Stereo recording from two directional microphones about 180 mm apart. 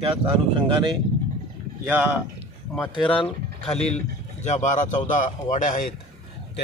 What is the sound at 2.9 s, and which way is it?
Speech, 30° left (ahead or behind).